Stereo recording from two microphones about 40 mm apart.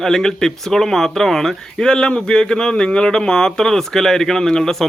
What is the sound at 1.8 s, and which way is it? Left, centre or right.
Speech, left.